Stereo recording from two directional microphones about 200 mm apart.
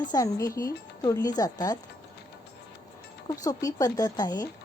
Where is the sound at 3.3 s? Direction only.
15° left (ahead or behind).